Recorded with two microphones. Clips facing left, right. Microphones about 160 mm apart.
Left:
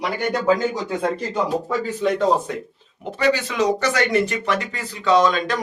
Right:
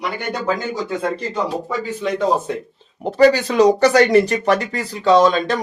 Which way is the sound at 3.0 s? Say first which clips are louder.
Right 7 dB; 35° right (ahead or behind).